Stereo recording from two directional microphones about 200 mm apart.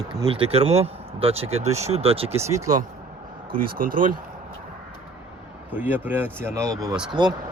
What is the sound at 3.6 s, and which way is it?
Speech, 45° right (ahead or behind).